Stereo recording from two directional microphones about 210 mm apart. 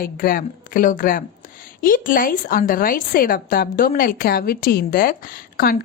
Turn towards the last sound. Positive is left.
turn(degrees=40)  # may be behind; listen again after turning